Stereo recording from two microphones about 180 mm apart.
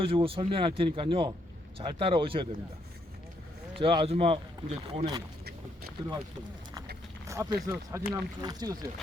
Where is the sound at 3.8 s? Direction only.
30° right (ahead or behind).